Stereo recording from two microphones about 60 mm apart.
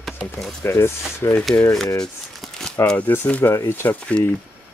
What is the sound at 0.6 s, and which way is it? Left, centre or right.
Hammer, left.